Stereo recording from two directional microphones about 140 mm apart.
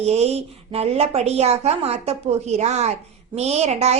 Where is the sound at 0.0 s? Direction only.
50° right (ahead or behind).